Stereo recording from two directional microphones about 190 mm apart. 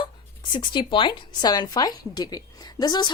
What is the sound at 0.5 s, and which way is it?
Speech, 25° left (ahead or behind).